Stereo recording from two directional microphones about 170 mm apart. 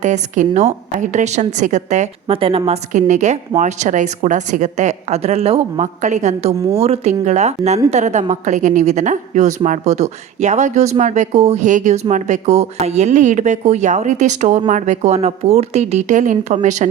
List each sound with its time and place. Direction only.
0.0 s a woman's voice: 45° right (ahead or behind)